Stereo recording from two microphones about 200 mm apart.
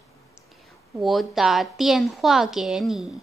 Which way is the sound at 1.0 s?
Centre (ahead or behind).